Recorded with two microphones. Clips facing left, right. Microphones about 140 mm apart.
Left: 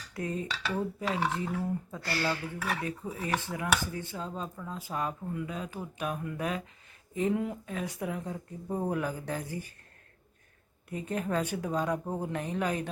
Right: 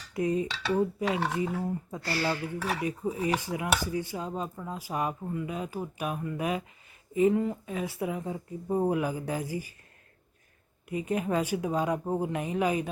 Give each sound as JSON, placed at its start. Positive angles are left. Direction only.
{"t": 0.1, "sound": "speech", "side_deg": -10}
{"t": 10.8, "sound": "speech", "side_deg": -10}